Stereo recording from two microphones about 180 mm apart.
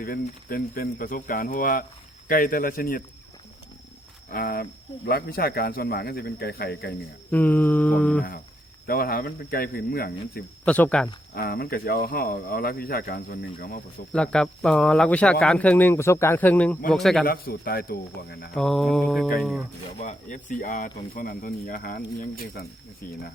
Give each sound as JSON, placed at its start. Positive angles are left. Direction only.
{"t": 0.0, "sound": "speech", "side_deg": 55}
{"t": 4.3, "sound": "speech", "side_deg": 55}
{"t": 7.3, "sound": "speech", "side_deg": 10}
{"t": 8.9, "sound": "speech", "side_deg": 55}
{"t": 10.7, "sound": "speech", "side_deg": 10}
{"t": 11.3, "sound": "speech", "side_deg": 55}
{"t": 14.1, "sound": "speech", "side_deg": 5}
{"t": 16.9, "sound": "mantra", "side_deg": 5}
{"t": 17.2, "sound": "speech", "side_deg": 55}
{"t": 18.5, "sound": "mantra", "side_deg": 0}
{"t": 20.0, "sound": "speech", "side_deg": 45}